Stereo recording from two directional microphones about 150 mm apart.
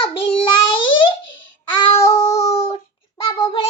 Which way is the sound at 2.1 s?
20° left (ahead or behind).